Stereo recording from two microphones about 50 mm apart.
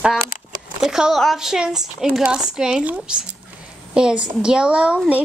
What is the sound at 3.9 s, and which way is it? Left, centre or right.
A woman's voice, centre.